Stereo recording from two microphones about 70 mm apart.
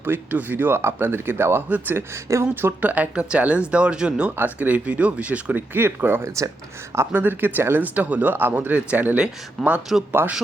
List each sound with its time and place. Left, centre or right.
0.0 s speech: right
2.8 s speech: right
6.2 s speech: right
7.1 s speech: right
9.6 s a man's voice: centre
10.2 s speech: right